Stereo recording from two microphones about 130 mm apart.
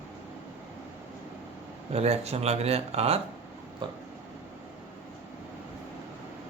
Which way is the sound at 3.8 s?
40° right (ahead or behind).